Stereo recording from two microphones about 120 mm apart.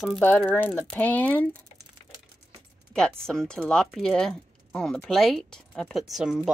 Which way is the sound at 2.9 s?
5° left (ahead or behind).